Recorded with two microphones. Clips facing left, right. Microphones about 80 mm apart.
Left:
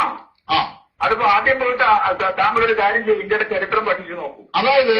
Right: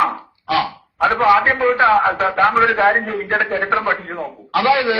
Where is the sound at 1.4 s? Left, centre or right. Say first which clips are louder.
Right 2 dB; right.